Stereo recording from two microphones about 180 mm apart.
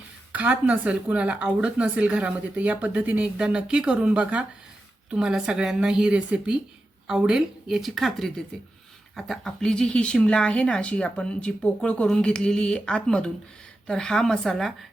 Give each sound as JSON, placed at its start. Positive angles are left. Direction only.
{"t": 0.3, "sound": "a woman's voice", "side_deg": -10}